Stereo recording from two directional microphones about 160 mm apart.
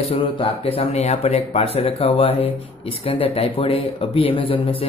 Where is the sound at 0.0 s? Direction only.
35° left (ahead or behind).